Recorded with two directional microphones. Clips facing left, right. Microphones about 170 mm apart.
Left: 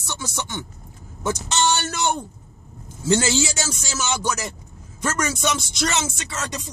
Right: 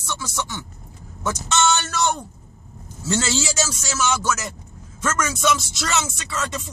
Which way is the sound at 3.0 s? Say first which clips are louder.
Left 4 dB; 15° left (ahead or behind).